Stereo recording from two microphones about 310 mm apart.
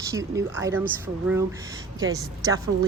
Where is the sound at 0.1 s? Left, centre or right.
Centre.